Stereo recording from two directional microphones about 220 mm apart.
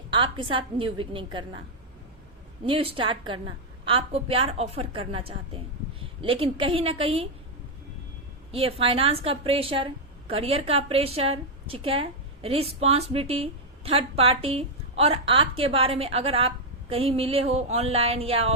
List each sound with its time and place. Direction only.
0.1 s a woman's voice: 20° right (ahead or behind)
2.6 s a woman's voice: 25° right (ahead or behind)
8.5 s a woman's voice: 25° right (ahead or behind)